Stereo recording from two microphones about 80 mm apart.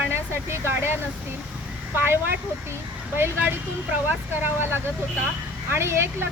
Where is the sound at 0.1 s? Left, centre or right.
Right.